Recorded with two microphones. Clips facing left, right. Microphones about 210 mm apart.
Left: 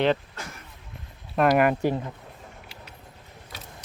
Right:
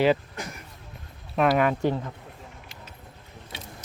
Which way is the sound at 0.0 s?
5° right (ahead or behind).